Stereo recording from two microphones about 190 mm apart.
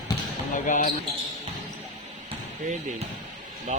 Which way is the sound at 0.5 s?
45° left (ahead or behind).